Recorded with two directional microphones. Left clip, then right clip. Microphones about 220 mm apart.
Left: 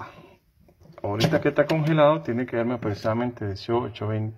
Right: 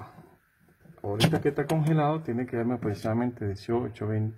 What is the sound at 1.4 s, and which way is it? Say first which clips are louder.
Speech: left 6 dB; 10° right (ahead or behind).